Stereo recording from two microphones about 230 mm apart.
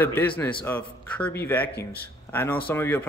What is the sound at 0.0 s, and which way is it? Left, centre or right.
A man's voice, centre.